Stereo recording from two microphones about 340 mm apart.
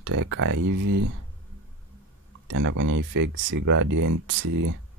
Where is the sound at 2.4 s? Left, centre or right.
Right.